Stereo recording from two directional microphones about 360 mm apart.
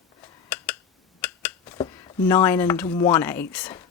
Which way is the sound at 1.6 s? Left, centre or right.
Centre.